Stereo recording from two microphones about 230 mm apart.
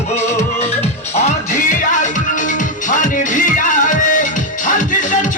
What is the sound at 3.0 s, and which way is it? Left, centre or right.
Music, left.